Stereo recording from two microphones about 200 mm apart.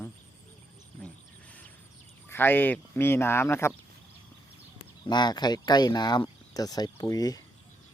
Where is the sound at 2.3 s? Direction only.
10° left (ahead or behind).